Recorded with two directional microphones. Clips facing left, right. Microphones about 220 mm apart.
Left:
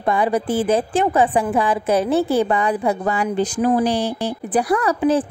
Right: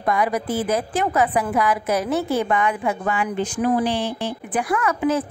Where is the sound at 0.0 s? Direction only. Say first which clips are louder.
Left 3 dB; 30° left (ahead or behind).